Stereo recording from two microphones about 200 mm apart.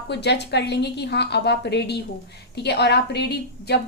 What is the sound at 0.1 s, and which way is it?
A woman's voice, 55° left (ahead or behind).